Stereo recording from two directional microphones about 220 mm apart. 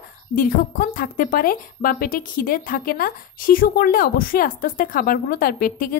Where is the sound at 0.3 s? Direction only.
40° left (ahead or behind).